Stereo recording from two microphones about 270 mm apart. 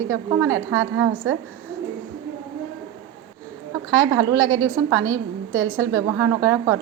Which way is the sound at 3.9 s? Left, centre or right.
Centre.